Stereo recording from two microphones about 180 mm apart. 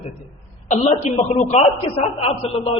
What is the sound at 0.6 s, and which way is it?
A man's voice, 40° left (ahead or behind).